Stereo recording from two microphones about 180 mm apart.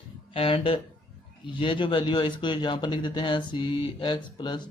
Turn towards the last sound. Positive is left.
turn(degrees=25)  # may be behind; listen again after turning